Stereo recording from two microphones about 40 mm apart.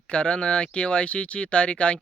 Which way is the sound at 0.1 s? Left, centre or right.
Left.